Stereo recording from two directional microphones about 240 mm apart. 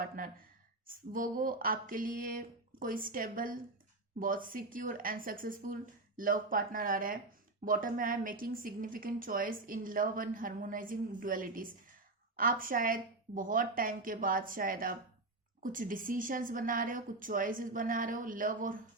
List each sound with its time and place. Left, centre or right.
0.2 s a woman's voice: right